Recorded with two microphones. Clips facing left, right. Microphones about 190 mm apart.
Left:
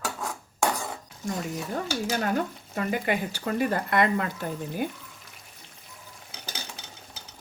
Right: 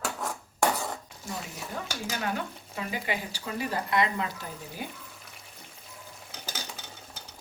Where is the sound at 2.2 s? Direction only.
45° left (ahead or behind).